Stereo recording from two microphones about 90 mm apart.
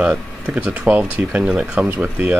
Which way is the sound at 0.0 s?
15° right (ahead or behind).